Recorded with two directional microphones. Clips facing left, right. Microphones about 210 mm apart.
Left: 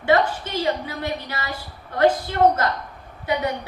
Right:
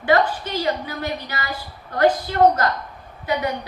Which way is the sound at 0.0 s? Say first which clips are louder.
Right 1 dB; 25° left (ahead or behind).